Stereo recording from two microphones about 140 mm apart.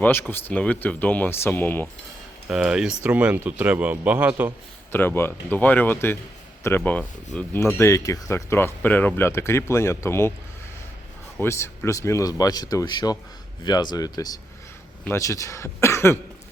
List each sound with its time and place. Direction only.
0.0 s speech: 15° left (ahead or behind)
2.5 s a man's voice: 5° right (ahead or behind)
4.9 s speech: 15° left (ahead or behind)
11.3 s speech: 15° left (ahead or behind)